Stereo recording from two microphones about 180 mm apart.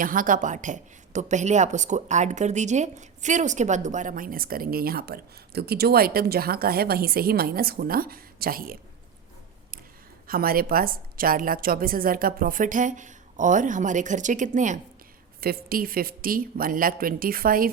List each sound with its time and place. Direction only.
0.0 s a woman's voice: 50° right (ahead or behind)
10.2 s a woman's voice: 55° right (ahead or behind)
15.4 s a woman's voice: 55° right (ahead or behind)